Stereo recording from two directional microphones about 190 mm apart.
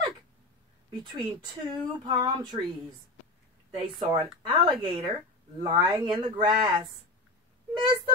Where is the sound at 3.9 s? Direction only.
25° right (ahead or behind).